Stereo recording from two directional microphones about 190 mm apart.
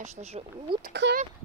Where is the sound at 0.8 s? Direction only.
60° right (ahead or behind).